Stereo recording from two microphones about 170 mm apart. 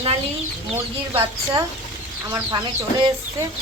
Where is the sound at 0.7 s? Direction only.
15° right (ahead or behind).